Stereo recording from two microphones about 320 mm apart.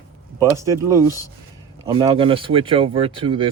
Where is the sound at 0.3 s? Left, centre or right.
Centre.